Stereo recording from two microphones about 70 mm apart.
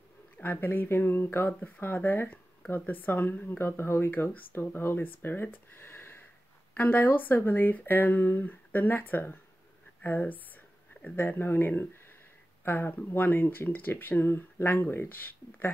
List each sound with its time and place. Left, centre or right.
0.4 s speech: left